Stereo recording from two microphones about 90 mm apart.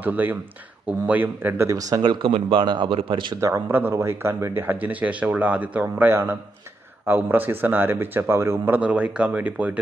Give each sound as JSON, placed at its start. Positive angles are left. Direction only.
{"t": 0.0, "sound": "speech", "side_deg": -20}
{"t": 1.7, "sound": "speech", "side_deg": -40}
{"t": 2.0, "sound": "speech", "side_deg": -65}
{"t": 3.3, "sound": "speech", "side_deg": -35}
{"t": 8.8, "sound": "speech", "side_deg": -15}